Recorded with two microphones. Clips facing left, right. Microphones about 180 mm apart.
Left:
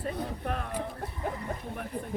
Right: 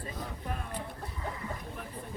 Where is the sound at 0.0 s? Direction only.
65° left (ahead or behind).